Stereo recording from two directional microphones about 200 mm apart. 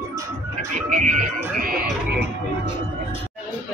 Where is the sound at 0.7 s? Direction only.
40° right (ahead or behind).